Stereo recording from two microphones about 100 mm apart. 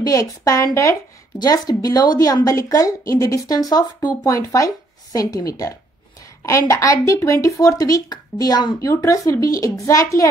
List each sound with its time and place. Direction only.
0.0 s speech: 40° left (ahead or behind)